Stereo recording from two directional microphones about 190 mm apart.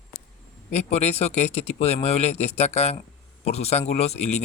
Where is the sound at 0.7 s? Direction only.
35° left (ahead or behind).